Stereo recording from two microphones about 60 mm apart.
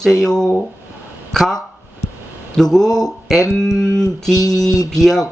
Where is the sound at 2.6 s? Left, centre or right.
Centre.